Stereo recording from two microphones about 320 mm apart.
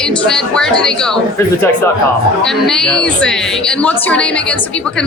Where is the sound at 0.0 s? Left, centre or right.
Centre.